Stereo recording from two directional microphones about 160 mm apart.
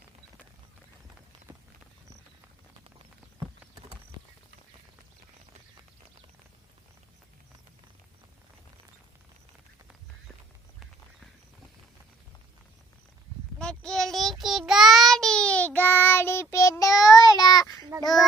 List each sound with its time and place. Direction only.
13.6 s child singing: 5° left (ahead or behind); by 17.7 s 25° left (ahead or behind)